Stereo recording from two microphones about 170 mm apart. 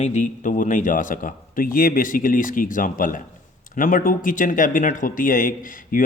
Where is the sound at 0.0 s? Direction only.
45° left (ahead or behind).